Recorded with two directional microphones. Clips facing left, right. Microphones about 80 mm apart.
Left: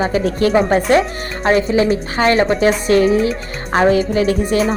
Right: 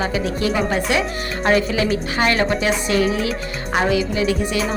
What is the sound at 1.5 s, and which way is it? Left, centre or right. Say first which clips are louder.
A woman's voice: left 4 dB; left.